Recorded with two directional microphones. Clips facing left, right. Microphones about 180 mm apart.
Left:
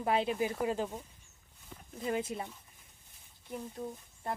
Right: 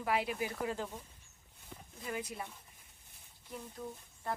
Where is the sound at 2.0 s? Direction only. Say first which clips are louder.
Left 6 dB; 25° left (ahead or behind).